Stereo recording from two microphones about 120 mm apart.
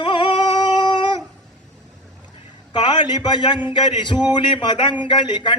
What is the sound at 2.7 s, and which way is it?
Music, 35° left (ahead or behind).